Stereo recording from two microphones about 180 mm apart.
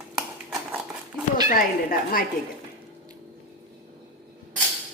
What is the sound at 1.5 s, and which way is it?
Speech, 50° left (ahead or behind).